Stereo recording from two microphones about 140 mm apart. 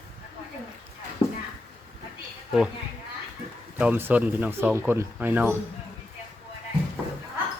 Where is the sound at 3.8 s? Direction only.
15° right (ahead or behind).